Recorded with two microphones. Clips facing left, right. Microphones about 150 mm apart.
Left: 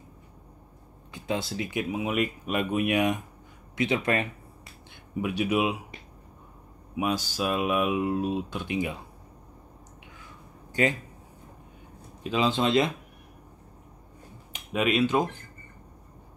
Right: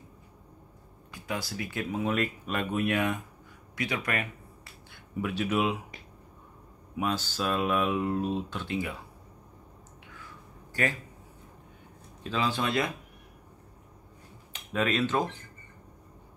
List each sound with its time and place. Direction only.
1.1 s speech: 25° left (ahead or behind)
5.1 s speech: 15° left (ahead or behind)
7.0 s speech: 15° left (ahead or behind)
10.7 s a sound: 20° left (ahead or behind)
12.2 s speech: 20° left (ahead or behind)
14.5 s speech: 15° left (ahead or behind)